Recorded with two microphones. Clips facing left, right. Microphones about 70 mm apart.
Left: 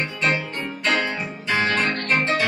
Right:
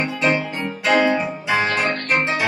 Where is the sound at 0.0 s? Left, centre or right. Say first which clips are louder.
Right 4 dB; centre.